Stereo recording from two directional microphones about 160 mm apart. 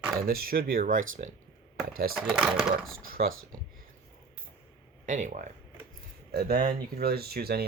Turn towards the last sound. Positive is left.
turn(degrees=-80)